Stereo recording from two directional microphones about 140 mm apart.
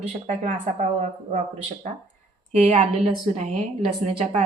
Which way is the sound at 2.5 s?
50° right (ahead or behind).